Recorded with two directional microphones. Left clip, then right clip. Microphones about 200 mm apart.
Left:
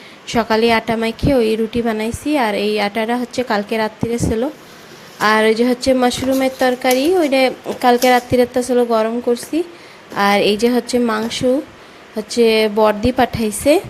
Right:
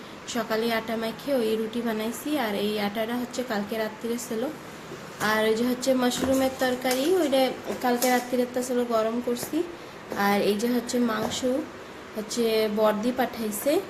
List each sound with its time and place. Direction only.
0.3 s a woman's voice: 40° left (ahead or behind)
5.2 s a woman's voice: 40° left (ahead or behind)